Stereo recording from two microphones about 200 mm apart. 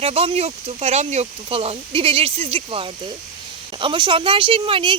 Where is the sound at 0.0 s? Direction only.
30° right (ahead or behind).